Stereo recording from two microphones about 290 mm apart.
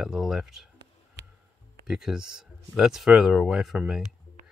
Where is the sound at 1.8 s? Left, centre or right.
Centre.